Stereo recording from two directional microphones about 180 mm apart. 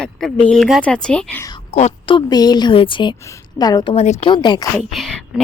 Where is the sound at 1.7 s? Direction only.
35° left (ahead or behind).